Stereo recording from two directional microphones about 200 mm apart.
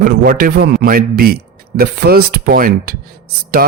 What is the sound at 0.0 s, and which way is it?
Speech, 50° right (ahead or behind).